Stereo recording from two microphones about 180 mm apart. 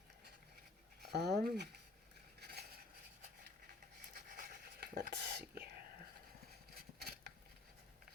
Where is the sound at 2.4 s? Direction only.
65° right (ahead or behind).